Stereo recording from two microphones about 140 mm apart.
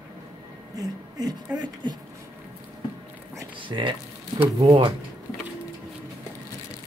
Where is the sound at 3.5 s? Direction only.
35° right (ahead or behind).